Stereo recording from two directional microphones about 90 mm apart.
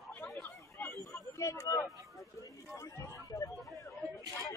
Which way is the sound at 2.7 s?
35° left (ahead or behind).